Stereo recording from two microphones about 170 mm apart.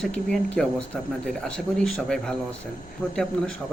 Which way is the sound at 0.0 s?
5° left (ahead or behind).